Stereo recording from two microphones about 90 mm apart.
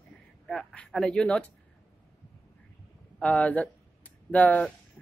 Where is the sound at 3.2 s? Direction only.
15° left (ahead or behind).